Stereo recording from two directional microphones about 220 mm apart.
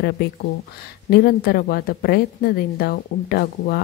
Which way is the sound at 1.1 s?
45° left (ahead or behind).